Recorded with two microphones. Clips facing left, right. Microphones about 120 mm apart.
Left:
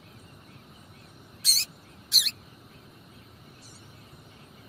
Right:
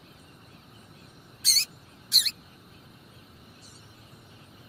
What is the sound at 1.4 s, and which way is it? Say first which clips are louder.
Rodents: right 1 dB; 15° left (ahead or behind).